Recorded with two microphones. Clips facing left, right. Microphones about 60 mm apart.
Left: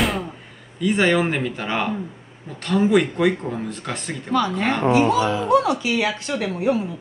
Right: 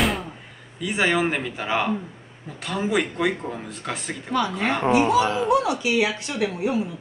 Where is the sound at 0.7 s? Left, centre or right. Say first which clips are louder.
Left 4 dB; centre.